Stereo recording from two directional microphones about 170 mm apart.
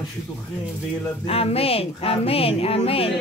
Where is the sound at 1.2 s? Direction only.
35° left (ahead or behind).